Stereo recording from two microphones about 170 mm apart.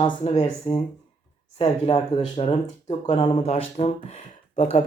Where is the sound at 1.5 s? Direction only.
35° left (ahead or behind).